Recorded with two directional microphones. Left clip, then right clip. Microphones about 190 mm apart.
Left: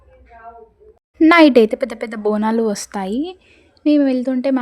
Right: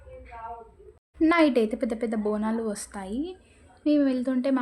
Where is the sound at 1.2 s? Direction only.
50° left (ahead or behind).